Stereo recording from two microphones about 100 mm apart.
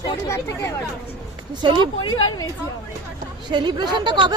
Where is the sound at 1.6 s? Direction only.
50° right (ahead or behind).